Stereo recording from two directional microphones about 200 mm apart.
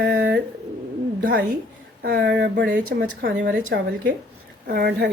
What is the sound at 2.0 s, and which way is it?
A woman's voice, 50° right (ahead or behind).